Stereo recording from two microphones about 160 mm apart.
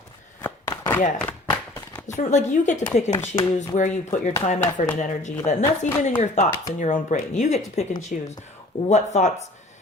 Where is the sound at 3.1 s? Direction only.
20° left (ahead or behind).